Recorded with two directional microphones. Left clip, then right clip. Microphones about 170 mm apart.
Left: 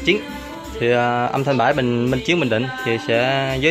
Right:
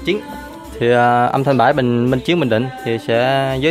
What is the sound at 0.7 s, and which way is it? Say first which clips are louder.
Speech: right 5 dB; 20° right (ahead or behind).